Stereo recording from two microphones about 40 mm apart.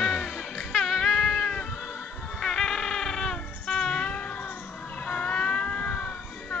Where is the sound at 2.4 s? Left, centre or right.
Centre.